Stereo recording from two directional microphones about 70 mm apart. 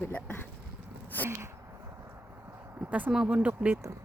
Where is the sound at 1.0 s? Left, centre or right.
Left.